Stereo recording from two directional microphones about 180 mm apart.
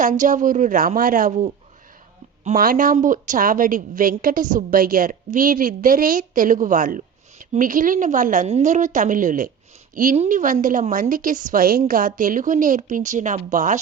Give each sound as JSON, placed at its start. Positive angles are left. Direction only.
{"t": 0.0, "sound": "a woman's voice", "side_deg": -45}
{"t": 2.6, "sound": "a woman's voice", "side_deg": -50}